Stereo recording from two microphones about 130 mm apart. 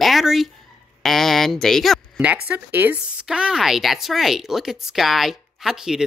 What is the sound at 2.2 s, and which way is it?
Speech, 10° right (ahead or behind).